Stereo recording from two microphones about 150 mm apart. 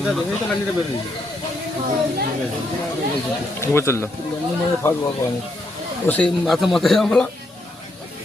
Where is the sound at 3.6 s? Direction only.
15° left (ahead or behind).